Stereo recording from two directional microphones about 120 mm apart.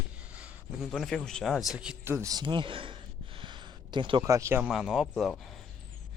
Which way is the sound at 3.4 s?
40° right (ahead or behind).